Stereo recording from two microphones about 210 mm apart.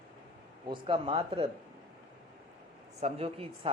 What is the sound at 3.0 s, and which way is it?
Speech, 30° right (ahead or behind).